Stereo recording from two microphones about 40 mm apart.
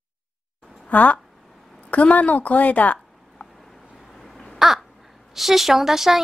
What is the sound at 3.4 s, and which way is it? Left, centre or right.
Vehicle, left.